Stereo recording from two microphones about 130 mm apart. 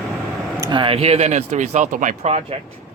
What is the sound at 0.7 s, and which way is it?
Speech, 45° right (ahead or behind).